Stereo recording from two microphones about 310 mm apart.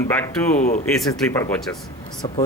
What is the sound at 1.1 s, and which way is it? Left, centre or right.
Speech, centre.